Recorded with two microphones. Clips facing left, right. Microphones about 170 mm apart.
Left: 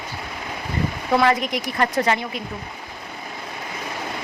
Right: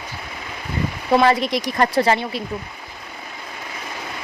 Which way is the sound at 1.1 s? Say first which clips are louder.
Right 3 dB; 30° right (ahead or behind).